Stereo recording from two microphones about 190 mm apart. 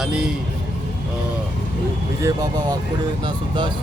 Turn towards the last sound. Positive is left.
turn(degrees=-20)  # may be behind; listen again after turning